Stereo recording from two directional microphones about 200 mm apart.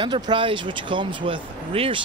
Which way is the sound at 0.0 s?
25° right (ahead or behind).